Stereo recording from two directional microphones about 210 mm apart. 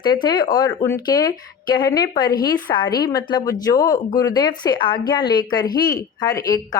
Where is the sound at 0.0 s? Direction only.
20° left (ahead or behind).